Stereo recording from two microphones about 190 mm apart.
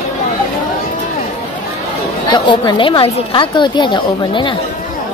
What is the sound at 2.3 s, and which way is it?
A woman's voice, 25° left (ahead or behind).